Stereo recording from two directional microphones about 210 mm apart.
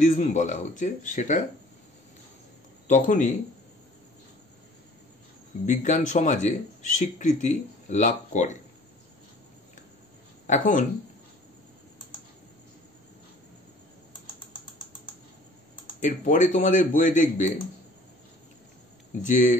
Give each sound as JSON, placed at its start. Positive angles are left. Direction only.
{"t": 0.0, "sound": "speech", "side_deg": 35}
{"t": 2.9, "sound": "speech", "side_deg": 35}
{"t": 5.7, "sound": "speech", "side_deg": 35}
{"t": 10.4, "sound": "speech", "side_deg": 35}
{"t": 16.0, "sound": "speech", "side_deg": 35}
{"t": 19.2, "sound": "speech", "side_deg": 35}